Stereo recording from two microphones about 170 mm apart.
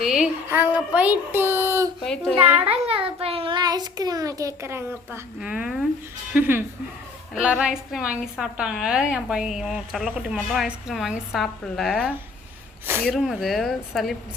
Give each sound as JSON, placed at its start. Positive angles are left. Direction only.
{"t": 0.0, "sound": "a sound", "side_deg": 0}
{"t": 0.4, "sound": "a child's voice", "side_deg": -10}
{"t": 2.8, "sound": "a child's voice", "side_deg": -35}
{"t": 5.4, "sound": "a woman's voice", "side_deg": -5}